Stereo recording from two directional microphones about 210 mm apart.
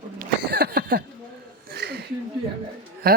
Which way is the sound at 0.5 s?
45° right (ahead or behind).